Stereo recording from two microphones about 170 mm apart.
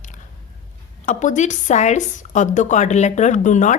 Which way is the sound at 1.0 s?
45° left (ahead or behind).